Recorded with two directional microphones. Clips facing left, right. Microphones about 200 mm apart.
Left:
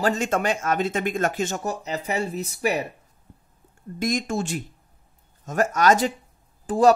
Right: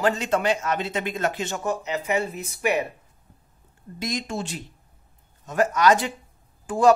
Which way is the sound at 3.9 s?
50° left (ahead or behind).